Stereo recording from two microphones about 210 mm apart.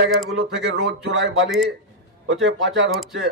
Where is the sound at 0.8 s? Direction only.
50° right (ahead or behind).